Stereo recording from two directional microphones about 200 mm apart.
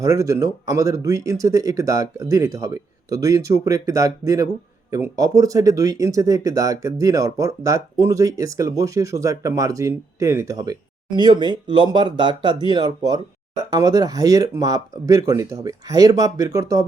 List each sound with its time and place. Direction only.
0.0 s speech: 15° right (ahead or behind)